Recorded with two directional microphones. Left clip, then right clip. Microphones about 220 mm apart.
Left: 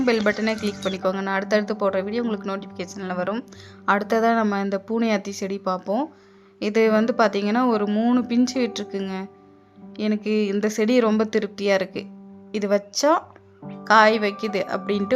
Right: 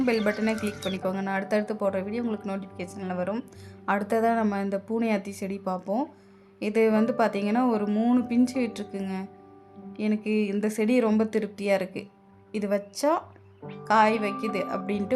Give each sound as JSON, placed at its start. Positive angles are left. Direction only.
{"t": 0.0, "sound": "speech", "side_deg": 20}